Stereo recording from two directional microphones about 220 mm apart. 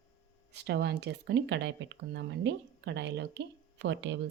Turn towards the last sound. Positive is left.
turn(degrees=-55)  # may be behind; listen again after turning